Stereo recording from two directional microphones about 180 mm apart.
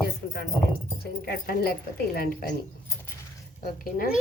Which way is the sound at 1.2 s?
60° left (ahead or behind).